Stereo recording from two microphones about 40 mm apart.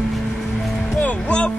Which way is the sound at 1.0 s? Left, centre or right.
Left.